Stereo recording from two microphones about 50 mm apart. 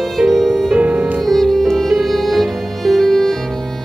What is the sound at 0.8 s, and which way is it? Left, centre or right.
Music, right.